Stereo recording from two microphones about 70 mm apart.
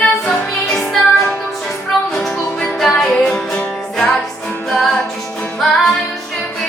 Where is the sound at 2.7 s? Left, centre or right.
Centre.